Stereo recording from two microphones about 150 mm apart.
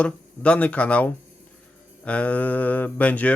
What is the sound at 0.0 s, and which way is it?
A man's voice, 10° left (ahead or behind).